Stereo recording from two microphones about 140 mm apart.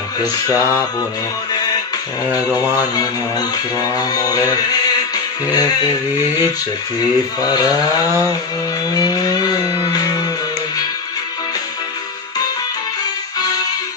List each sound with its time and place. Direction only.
0.2 s music: 25° left (ahead or behind)
2.3 s music: 25° left (ahead or behind)
7.4 s music: 30° left (ahead or behind)
8.9 s a sound: 30° left (ahead or behind)